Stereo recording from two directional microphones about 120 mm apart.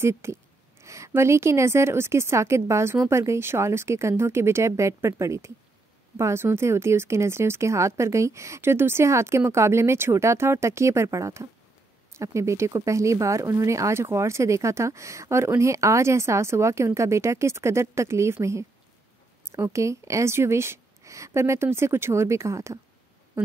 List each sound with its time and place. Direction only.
0.0 s speech: 25° right (ahead or behind)